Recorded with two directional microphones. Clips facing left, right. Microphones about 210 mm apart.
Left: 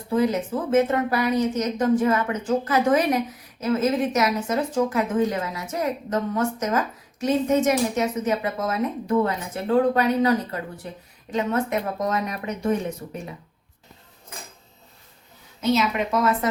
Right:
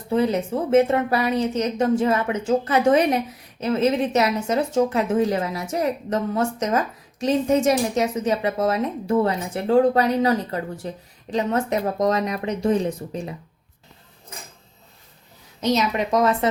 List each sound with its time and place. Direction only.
0.1 s a woman's voice: 30° right (ahead or behind)
15.6 s speech: 40° right (ahead or behind)